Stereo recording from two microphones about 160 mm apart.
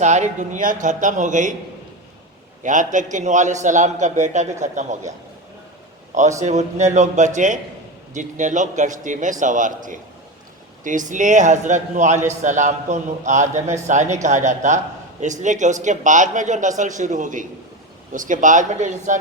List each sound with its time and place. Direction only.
0.0 s a man's voice: 50° right (ahead or behind)
2.6 s a man's voice: 50° right (ahead or behind)
6.4 s a man's voice: 45° right (ahead or behind)